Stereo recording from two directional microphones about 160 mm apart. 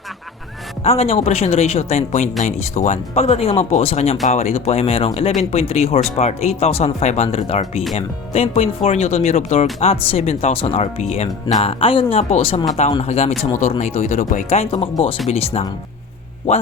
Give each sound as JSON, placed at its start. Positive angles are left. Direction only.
{"t": 0.9, "sound": "speech", "side_deg": 40}